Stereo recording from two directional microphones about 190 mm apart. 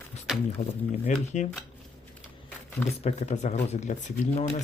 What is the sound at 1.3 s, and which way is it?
Speech, 40° left (ahead or behind).